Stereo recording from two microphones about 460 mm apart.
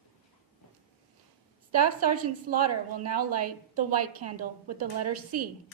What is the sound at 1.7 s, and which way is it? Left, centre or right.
A woman's voice, right.